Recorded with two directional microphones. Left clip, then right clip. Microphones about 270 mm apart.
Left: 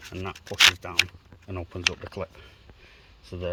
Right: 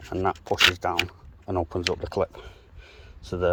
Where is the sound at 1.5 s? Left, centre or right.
Right.